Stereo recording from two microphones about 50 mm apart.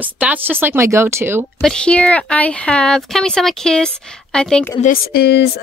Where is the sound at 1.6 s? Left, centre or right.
Centre.